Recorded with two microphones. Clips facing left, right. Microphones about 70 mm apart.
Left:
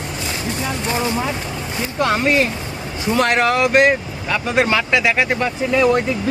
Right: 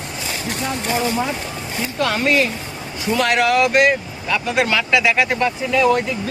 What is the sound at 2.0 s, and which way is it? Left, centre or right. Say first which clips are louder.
Speech: left 1 dB; left.